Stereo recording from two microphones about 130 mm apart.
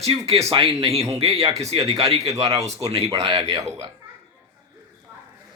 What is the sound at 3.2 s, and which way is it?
Speech, 40° right (ahead or behind).